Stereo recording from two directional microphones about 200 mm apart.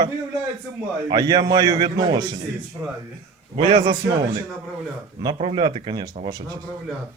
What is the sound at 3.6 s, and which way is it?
Speech, 25° right (ahead or behind).